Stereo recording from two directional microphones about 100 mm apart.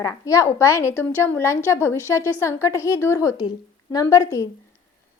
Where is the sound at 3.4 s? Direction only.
40° left (ahead or behind).